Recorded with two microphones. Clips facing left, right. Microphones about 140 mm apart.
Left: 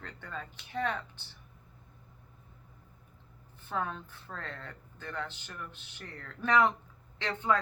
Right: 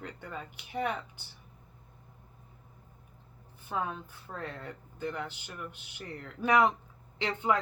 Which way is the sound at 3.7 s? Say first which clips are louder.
Right 1 dB; 10° right (ahead or behind).